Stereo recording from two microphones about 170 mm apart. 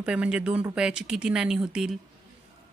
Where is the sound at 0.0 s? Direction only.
5° right (ahead or behind).